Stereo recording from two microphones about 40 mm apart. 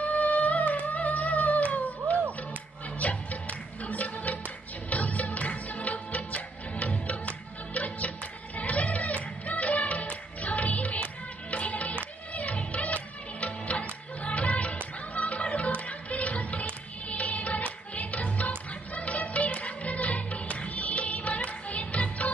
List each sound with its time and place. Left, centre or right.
0.0 s music: left